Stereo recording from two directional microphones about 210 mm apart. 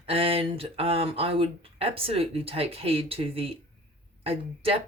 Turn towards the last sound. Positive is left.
turn(degrees=-25)  # may be behind; listen again after turning